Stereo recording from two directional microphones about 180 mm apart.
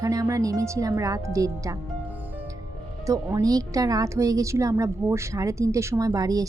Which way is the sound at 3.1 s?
15° right (ahead or behind).